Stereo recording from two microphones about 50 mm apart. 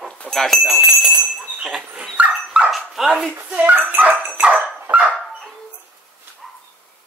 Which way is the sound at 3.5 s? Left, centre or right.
Right.